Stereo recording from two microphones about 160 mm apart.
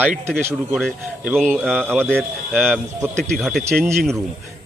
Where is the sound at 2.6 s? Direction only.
10° right (ahead or behind).